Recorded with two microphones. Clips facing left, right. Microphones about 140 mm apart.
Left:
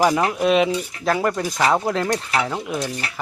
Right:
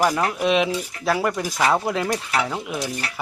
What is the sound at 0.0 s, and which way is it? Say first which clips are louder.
Stir: left 2 dB; 5° left (ahead or behind).